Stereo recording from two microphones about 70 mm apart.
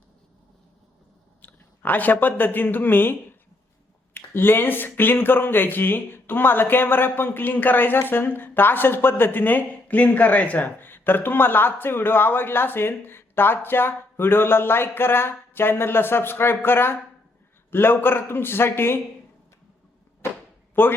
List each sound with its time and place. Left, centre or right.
1.4 s speech: left
20.8 s speech: left